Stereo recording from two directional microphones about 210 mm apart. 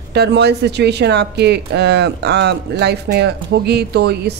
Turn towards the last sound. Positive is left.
turn(degrees=-50)  # may be behind; listen again after turning